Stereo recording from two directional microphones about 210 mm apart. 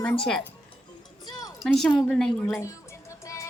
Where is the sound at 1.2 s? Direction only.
20° left (ahead or behind).